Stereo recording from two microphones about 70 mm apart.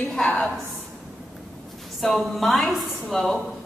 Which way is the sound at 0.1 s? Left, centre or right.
Centre.